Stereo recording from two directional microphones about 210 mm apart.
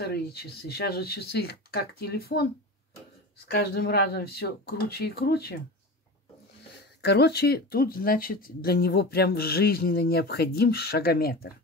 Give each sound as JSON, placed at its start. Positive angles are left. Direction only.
{"t": 0.0, "sound": "speech", "side_deg": 50}
{"t": 3.4, "sound": "speech", "side_deg": 50}
{"t": 7.0, "sound": "speech", "side_deg": 50}